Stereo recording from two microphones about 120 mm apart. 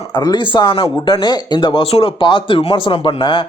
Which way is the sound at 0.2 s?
40° left (ahead or behind).